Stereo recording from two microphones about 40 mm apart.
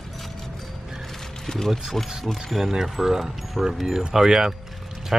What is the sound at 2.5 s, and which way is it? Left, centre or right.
Speech, centre.